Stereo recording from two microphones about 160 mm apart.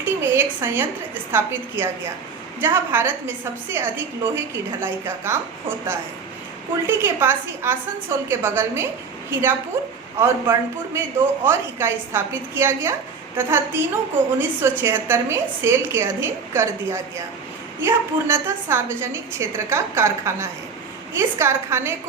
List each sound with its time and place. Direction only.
0.0 s a woman's voice: 15° right (ahead or behind)